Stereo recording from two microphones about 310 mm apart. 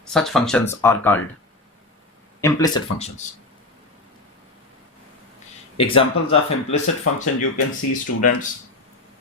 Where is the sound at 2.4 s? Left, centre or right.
Centre.